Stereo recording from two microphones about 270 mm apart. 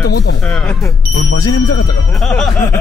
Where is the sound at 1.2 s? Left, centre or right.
Left.